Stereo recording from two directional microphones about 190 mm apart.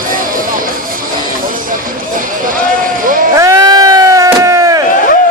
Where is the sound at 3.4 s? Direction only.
15° right (ahead or behind).